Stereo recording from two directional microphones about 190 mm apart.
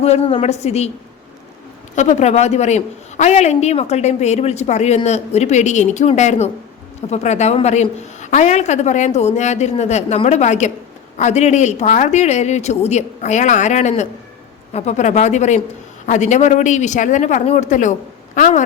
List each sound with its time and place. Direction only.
0.0 s a man's voice: 30° left (ahead or behind)
2.0 s a man's voice: 35° left (ahead or behind)